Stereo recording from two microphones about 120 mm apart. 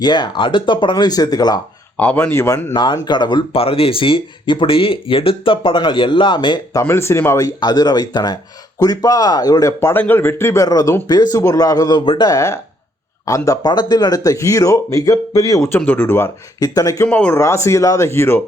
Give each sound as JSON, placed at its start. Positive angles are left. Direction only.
{"t": 0.0, "sound": "speech", "side_deg": 40}
{"t": 2.0, "sound": "speech", "side_deg": 15}
{"t": 2.7, "sound": "speech", "side_deg": 40}
{"t": 6.7, "sound": "speech", "side_deg": 20}
{"t": 15.8, "sound": "speech", "side_deg": 15}
{"t": 17.1, "sound": "speech", "side_deg": 15}
{"t": 17.4, "sound": "speech", "side_deg": 25}